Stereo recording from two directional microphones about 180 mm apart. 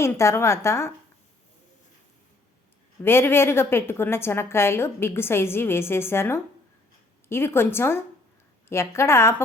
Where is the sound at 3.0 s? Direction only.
15° left (ahead or behind).